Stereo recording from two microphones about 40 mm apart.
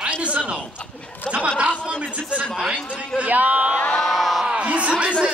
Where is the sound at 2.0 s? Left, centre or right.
Right.